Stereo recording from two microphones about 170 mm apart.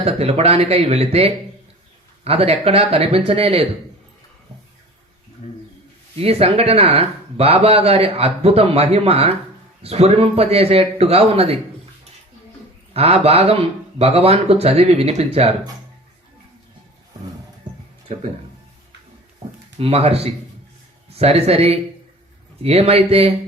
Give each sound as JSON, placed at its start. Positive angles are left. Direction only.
{"t": 0.0, "sound": "speech", "side_deg": -35}
{"t": 6.1, "sound": "speech", "side_deg": -35}
{"t": 12.9, "sound": "speech", "side_deg": -35}
{"t": 17.7, "sound": "music", "side_deg": -25}
{"t": 19.8, "sound": "speech", "side_deg": -35}